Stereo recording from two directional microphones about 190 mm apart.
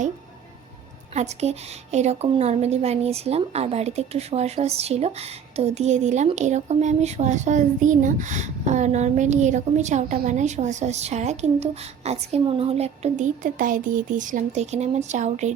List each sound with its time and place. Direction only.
1.1 s speech: 35° right (ahead or behind)